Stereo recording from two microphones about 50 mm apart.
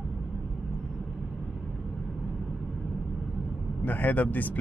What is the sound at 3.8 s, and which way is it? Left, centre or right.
Speech, left.